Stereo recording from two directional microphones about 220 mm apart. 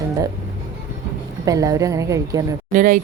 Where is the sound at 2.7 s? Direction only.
40° right (ahead or behind).